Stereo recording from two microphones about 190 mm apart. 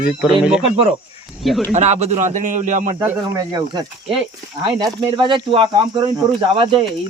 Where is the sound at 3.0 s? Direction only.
20° right (ahead or behind).